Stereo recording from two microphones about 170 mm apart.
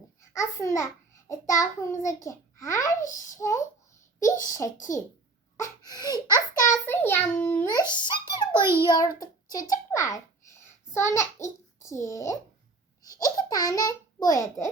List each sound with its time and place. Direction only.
0.2 s a child's voice: 15° left (ahead or behind)
9.9 s a sound: 20° left (ahead or behind)
11.8 s a child's voice: 15° left (ahead or behind)